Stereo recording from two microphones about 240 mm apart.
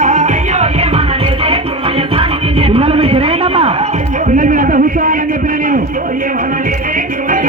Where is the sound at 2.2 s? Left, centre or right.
Right.